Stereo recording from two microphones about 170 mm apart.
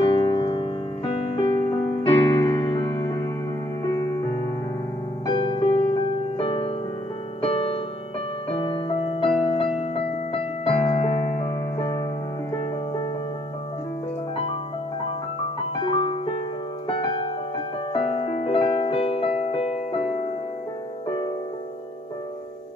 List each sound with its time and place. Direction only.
0.0 s piano: 25° left (ahead or behind)
1.7 s music: 25° left (ahead or behind)
5.2 s music: 30° left (ahead or behind)
15.7 s music: 25° left (ahead or behind)